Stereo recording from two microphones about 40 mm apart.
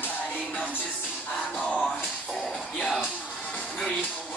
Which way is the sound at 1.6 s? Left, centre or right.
Left.